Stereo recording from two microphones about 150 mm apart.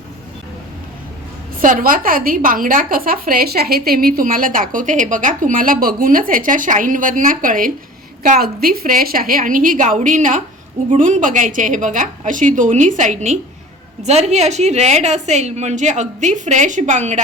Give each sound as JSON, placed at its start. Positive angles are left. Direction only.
{"t": 1.6, "sound": "a woman's voice", "side_deg": -65}
{"t": 8.2, "sound": "a woman's voice", "side_deg": -75}